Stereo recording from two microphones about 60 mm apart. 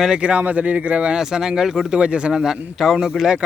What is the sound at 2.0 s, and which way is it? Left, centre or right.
Speech, centre.